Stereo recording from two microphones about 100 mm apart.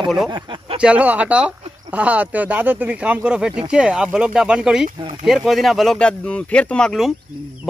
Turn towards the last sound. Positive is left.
turn(degrees=5)  # may be behind; listen again after turning